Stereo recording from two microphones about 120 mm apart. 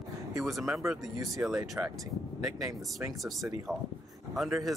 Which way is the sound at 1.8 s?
20° right (ahead or behind).